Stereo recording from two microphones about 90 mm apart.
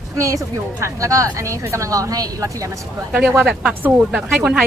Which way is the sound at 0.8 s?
35° right (ahead or behind).